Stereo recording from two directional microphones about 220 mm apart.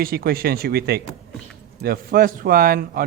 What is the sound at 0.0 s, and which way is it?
A man's voice, 45° right (ahead or behind).